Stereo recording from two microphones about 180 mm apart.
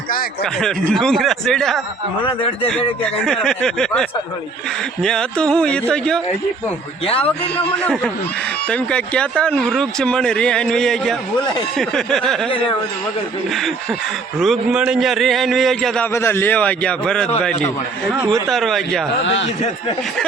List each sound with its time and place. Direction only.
0.6 s speech: centre (ahead or behind)
2.2 s speech: 30° left (ahead or behind)
3.2 s speech: 5° left (ahead or behind)
5.0 s speech: 5° left (ahead or behind)
7.3 s a man's voice: 5° left (ahead or behind)
14.3 s speech: centre (ahead or behind)
16.1 s a man's voice: 15° left (ahead or behind)
18.4 s speech: centre (ahead or behind)
19.2 s a man's voice: 90° left